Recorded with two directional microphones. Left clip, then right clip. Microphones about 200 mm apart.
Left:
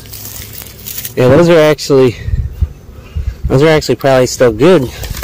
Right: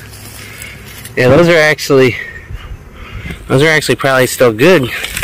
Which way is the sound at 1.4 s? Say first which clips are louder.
Left 1 dB; 25° left (ahead or behind).